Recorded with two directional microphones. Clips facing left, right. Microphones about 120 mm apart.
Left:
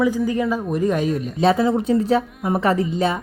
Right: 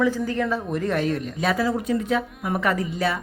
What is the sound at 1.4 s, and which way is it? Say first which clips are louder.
A woman's voice: left 6 dB; 25° left (ahead or behind).